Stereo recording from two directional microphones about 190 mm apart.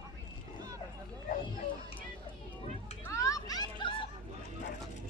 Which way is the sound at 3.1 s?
15° left (ahead or behind).